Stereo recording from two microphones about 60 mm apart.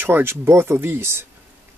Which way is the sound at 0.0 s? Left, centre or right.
Right.